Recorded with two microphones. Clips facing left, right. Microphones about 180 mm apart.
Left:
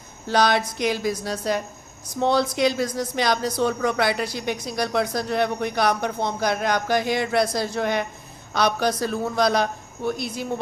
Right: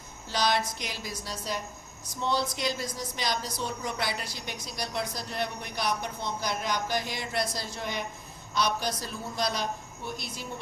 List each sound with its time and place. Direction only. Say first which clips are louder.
0.3 s speech: left 7 dB; 65° left (ahead or behind)